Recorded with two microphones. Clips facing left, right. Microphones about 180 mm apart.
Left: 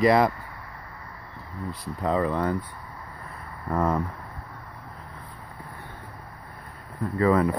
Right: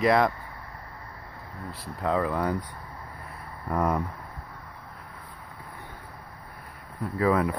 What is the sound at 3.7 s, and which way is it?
Speech, 5° right (ahead or behind).